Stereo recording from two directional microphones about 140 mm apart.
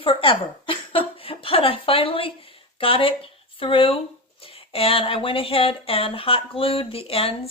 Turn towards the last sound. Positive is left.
turn(degrees=45)  # may be behind; listen again after turning